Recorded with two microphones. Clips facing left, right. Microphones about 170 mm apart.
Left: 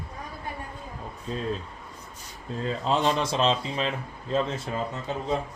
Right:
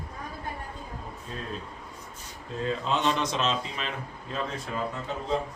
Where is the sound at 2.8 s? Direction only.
35° left (ahead or behind).